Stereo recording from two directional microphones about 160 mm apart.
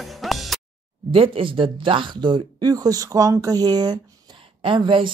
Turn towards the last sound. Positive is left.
turn(degrees=-30)  # may be behind; listen again after turning